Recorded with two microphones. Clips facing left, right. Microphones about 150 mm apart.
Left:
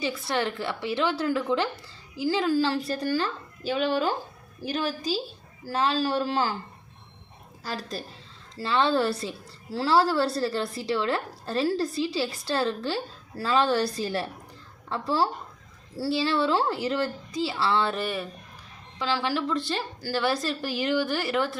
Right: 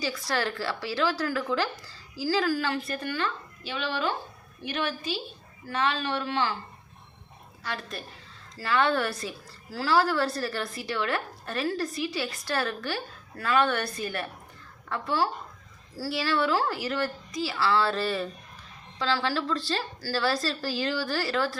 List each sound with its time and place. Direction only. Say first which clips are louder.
0.0 s a woman's voice: left 2 dB; 25° left (ahead or behind); by 6.6 s 40° left (ahead or behind)
7.6 s a woman's voice: left 2 dB; 35° left (ahead or behind); by 21.6 s 20° left (ahead or behind)